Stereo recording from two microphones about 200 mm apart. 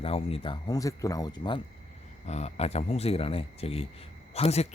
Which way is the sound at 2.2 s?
35° left (ahead or behind).